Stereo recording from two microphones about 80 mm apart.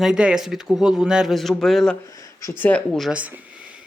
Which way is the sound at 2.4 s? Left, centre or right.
Left.